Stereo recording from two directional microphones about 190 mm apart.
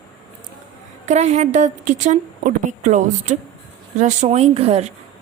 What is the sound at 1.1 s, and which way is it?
A woman's voice, 35° right (ahead or behind).